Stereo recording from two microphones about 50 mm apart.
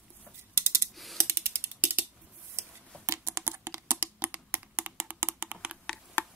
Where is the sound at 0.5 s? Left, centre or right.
Right.